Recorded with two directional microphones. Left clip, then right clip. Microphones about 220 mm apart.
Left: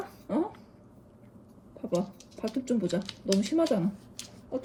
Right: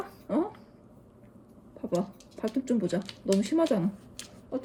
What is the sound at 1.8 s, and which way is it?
Speech, 5° right (ahead or behind).